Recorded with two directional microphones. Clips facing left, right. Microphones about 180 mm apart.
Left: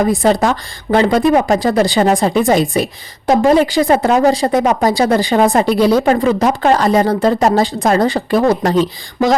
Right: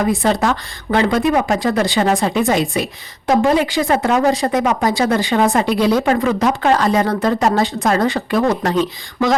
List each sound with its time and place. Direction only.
0.2 s speech: 35° left (ahead or behind)